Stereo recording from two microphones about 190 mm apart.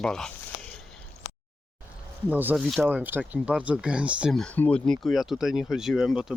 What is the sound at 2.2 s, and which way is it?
Speech, 10° right (ahead or behind).